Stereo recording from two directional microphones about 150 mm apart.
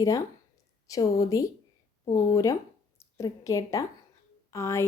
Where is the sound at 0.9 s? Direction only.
25° left (ahead or behind).